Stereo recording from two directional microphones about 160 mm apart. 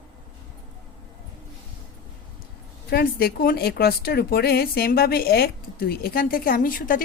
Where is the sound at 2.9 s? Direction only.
70° left (ahead or behind).